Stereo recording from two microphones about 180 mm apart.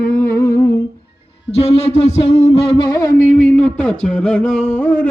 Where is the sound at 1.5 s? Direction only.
35° left (ahead or behind).